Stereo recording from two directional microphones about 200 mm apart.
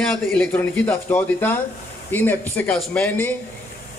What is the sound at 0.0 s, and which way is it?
A man's voice, 5° left (ahead or behind).